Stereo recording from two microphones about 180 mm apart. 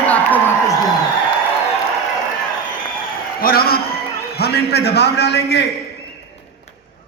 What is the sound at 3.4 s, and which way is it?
A man's voice, 55° left (ahead or behind).